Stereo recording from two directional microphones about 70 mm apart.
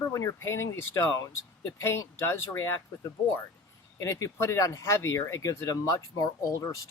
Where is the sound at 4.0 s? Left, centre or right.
Left.